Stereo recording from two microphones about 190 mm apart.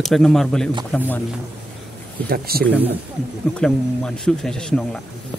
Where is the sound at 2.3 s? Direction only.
55° right (ahead or behind).